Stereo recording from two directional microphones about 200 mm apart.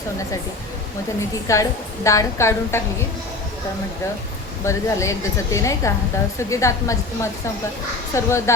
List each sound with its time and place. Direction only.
1.5 s a woman's voice: 15° left (ahead or behind)
4.6 s a woman's voice: 15° left (ahead or behind)